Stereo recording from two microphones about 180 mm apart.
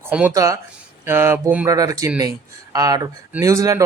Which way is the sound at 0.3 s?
20° right (ahead or behind).